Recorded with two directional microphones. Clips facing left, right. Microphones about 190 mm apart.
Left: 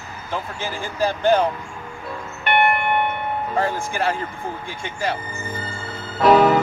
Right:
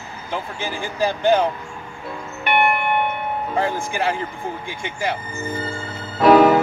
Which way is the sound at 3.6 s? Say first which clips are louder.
Right 1 dB; 20° right (ahead or behind).